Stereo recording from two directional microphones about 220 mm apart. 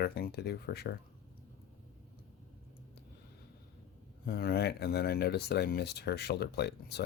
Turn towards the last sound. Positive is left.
turn(degrees=50)  # may be behind; listen again after turning